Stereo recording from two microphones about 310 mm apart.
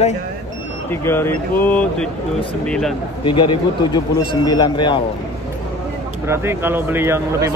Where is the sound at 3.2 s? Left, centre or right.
Centre.